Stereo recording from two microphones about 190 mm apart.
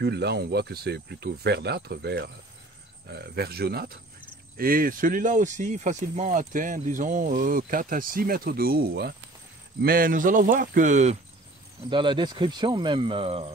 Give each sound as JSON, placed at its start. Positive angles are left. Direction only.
{"t": 0.0, "sound": "speech", "side_deg": -60}
{"t": 11.9, "sound": "speech", "side_deg": -25}